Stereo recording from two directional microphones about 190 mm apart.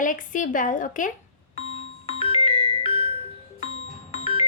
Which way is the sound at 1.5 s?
30° left (ahead or behind).